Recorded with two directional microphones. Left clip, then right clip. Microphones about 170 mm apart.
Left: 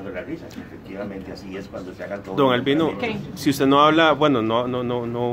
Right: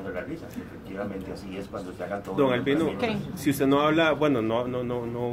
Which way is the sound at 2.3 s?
35° left (ahead or behind).